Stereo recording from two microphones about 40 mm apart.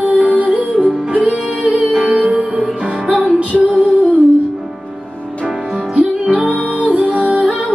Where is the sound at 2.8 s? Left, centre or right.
Right.